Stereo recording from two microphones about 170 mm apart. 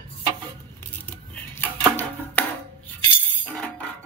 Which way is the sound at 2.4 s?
10° left (ahead or behind).